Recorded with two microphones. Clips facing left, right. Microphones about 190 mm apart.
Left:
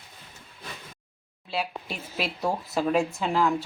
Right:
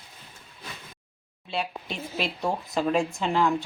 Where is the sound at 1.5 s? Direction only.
5° left (ahead or behind).